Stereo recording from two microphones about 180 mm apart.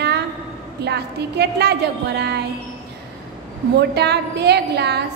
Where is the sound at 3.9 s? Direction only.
65° right (ahead or behind).